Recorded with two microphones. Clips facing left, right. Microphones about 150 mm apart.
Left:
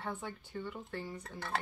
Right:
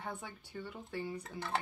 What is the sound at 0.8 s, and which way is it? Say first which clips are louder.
Speech: right 2 dB; 10° right (ahead or behind).